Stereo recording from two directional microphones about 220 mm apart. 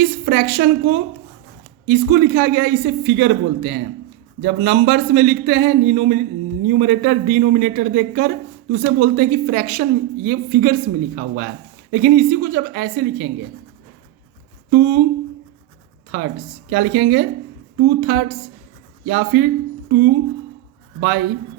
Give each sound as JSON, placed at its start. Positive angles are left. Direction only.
{"t": 0.0, "sound": "a woman's voice", "side_deg": -45}
{"t": 14.7, "sound": "a woman's voice", "side_deg": -50}
{"t": 16.1, "sound": "a woman's voice", "side_deg": -50}
{"t": 21.0, "sound": "a woman's voice", "side_deg": -50}